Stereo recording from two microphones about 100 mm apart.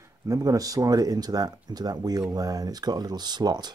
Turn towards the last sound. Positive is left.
turn(degrees=-45)  # may be behind; listen again after turning